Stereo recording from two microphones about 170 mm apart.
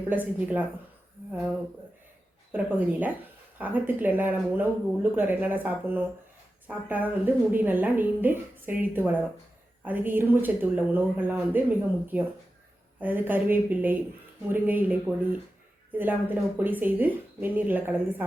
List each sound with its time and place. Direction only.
0.1 s a woman's voice: 10° right (ahead or behind)
2.5 s a woman's voice: 10° right (ahead or behind)